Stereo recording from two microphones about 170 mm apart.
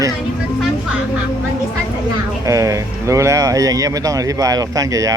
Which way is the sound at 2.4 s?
20° right (ahead or behind).